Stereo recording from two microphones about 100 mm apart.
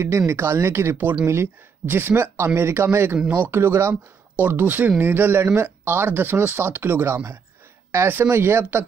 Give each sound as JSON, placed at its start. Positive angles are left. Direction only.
{"t": 0.3, "sound": "speech", "side_deg": -25}